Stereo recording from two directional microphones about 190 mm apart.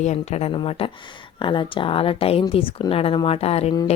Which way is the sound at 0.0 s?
35° left (ahead or behind).